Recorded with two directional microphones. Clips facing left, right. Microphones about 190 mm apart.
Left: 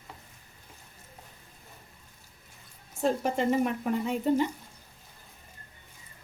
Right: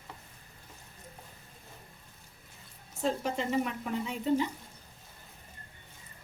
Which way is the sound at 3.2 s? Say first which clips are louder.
Left 5 dB; 50° left (ahead or behind).